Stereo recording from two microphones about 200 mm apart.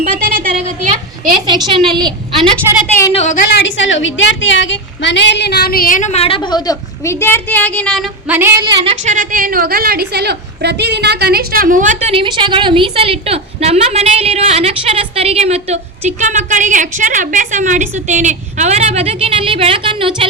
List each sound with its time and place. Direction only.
0.0 s a sound: 40° right (ahead or behind)
1.5 s a woman's voice: 20° right (ahead or behind)
3.1 s a woman's voice: 40° left (ahead or behind)
3.6 s a woman's voice: 70° left (ahead or behind); by 8.0 s 5° left (ahead or behind)
8.3 s a sound: 10° right (ahead or behind)
8.6 s a woman's voice: 25° right (ahead or behind)
9.1 s a woman's voice: 45° right (ahead or behind); by 20.1 s 25° right (ahead or behind)